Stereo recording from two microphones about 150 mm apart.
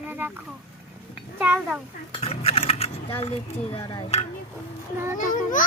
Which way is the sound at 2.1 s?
40° left (ahead or behind).